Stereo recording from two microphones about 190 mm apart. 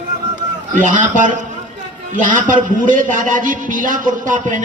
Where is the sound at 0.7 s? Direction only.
45° right (ahead or behind).